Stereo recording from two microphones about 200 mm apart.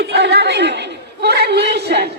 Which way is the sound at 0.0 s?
55° right (ahead or behind).